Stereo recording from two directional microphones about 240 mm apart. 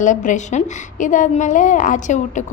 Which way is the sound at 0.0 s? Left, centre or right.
Left.